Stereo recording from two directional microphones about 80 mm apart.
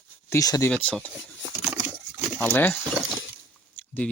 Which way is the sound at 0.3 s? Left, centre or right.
Left.